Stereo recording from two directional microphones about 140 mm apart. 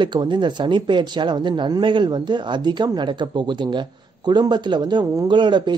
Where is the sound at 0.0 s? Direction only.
35° right (ahead or behind).